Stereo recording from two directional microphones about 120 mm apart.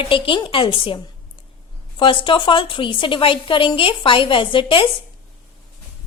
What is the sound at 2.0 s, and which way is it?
Speech, 45° left (ahead or behind).